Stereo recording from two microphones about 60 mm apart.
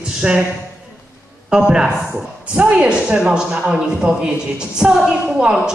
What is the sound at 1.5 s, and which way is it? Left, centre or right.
A man's voice, centre.